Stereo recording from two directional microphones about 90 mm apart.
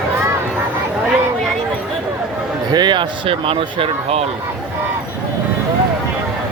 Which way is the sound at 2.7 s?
60° right (ahead or behind).